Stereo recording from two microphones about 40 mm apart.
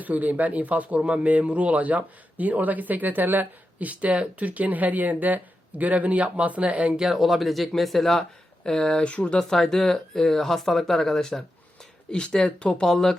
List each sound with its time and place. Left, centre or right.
0.0 s speech: right
7.1 s speech: centre
8.6 s speech: centre
9.4 s speech: centre
12.1 s speech: left
12.8 s speech: centre